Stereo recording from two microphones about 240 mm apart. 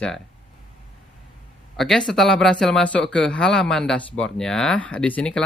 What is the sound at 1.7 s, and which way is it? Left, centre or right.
Speech, centre.